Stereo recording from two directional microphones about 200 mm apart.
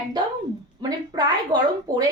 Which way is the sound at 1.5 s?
20° right (ahead or behind).